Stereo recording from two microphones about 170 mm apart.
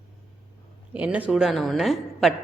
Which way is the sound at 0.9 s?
10° right (ahead or behind).